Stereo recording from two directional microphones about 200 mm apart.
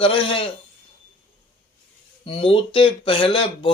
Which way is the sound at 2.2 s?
25° left (ahead or behind).